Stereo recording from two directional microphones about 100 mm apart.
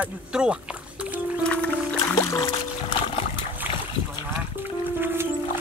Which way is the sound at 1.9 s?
30° left (ahead or behind).